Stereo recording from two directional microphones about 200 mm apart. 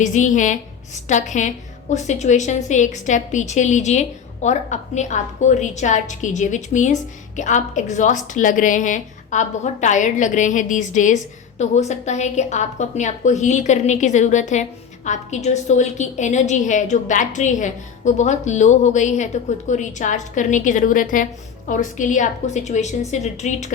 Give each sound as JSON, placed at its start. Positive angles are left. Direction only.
{"t": 0.0, "sound": "a woman's voice", "side_deg": 40}